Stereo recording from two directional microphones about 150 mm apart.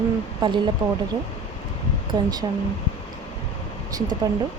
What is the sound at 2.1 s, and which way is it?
Speech, 25° right (ahead or behind).